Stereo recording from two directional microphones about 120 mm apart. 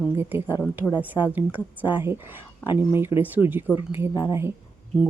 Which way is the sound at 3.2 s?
15° right (ahead or behind).